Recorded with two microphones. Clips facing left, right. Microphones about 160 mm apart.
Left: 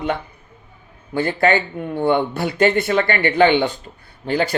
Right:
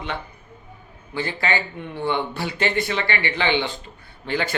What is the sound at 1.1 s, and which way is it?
Mantra, 50° left (ahead or behind).